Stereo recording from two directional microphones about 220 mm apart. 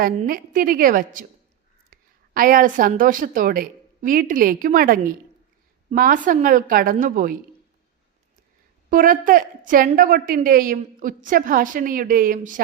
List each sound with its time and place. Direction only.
0.0 s a woman's voice: 40° right (ahead or behind)
8.9 s a woman's voice: 40° right (ahead or behind)